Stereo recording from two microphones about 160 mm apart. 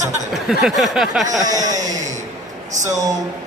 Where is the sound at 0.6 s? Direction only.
Centre (ahead or behind).